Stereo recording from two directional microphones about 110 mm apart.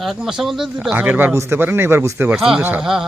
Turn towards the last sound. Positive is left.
turn(degrees=-5)  # may be behind; listen again after turning